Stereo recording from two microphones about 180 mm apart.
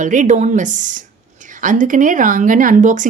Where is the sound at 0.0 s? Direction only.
45° right (ahead or behind).